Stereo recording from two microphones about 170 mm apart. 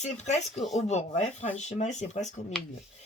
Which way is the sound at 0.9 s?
40° left (ahead or behind).